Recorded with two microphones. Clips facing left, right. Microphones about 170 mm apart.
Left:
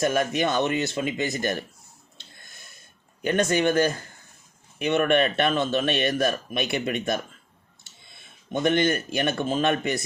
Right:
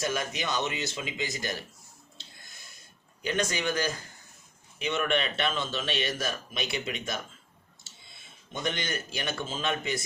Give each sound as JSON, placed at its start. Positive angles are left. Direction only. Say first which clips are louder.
{"t": 0.0, "sound": "a man's voice", "louder": "left 8 dB", "side_deg": 55}
{"t": 2.1, "sound": "breathing", "louder": "left 3 dB", "side_deg": 55}
{"t": 3.2, "sound": "a man's voice", "louder": "left 8 dB", "side_deg": 55}
{"t": 8.6, "sound": "a man's voice", "louder": "left 11 dB", "side_deg": 55}